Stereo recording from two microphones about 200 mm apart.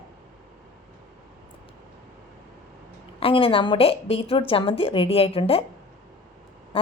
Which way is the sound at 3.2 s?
25° left (ahead or behind).